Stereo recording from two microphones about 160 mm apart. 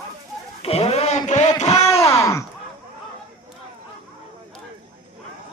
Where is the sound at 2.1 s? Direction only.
20° left (ahead or behind).